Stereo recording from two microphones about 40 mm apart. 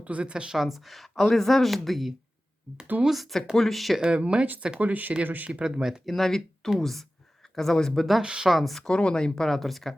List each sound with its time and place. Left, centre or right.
0.0 s speech: right
0.5 s speech: centre
4.0 s speech: right
4.8 s speech: right
5.6 s speech: centre
6.1 s speech: centre
8.2 s speech: right
8.4 s speech: centre
8.8 s speech: left; by 9.9 s centre